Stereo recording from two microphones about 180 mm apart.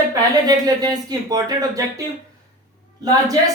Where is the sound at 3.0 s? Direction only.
20° right (ahead or behind).